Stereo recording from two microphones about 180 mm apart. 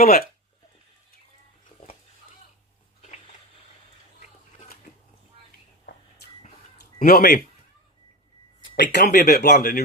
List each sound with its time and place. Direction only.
0.0 s speech: 55° left (ahead or behind)
7.0 s a man's voice: 50° left (ahead or behind)
8.7 s speech: 65° left (ahead or behind)